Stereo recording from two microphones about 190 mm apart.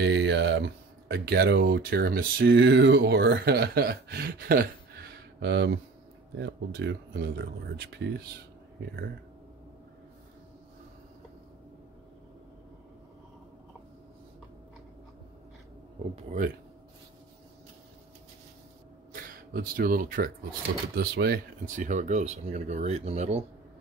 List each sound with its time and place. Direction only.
0.0 s speech: 70° right (ahead or behind)
19.5 s speech: 50° right (ahead or behind)